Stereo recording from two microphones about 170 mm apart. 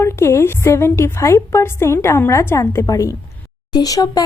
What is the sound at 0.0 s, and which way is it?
A woman's voice, 15° left (ahead or behind).